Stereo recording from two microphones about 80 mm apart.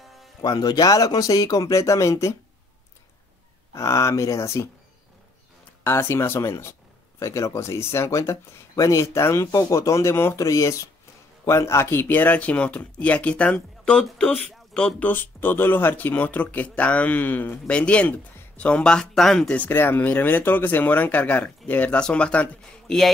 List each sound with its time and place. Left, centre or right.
0.4 s speech: left
3.7 s speech: left
5.9 s speech: left; by 15.0 s centre
15.0 s speech: left; by 19.5 s centre
19.5 s speech: left